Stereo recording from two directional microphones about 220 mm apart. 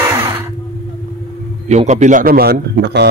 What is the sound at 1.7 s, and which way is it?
Speech, 30° right (ahead or behind).